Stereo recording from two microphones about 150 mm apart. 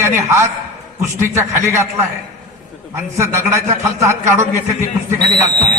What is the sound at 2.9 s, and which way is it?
A man's voice, 15° right (ahead or behind).